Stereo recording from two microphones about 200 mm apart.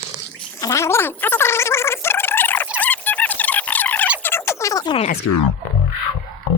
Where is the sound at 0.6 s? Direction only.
15° left (ahead or behind).